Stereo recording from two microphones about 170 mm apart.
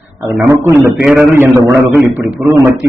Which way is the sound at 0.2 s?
15° right (ahead or behind).